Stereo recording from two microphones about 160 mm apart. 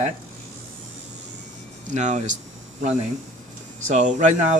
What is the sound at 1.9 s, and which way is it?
Speech, 50° right (ahead or behind).